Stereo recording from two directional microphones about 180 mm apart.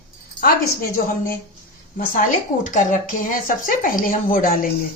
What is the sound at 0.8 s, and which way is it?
Speech, 55° left (ahead or behind).